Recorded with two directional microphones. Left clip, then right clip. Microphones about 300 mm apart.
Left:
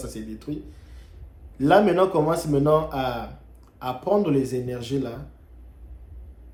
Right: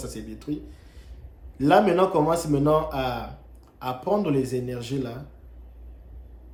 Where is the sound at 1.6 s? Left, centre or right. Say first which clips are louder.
Left 1 dB; centre.